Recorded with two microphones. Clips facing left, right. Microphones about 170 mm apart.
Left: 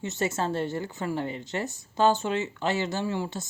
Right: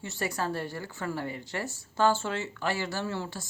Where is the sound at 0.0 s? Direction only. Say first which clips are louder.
Left 4 dB; 20° left (ahead or behind).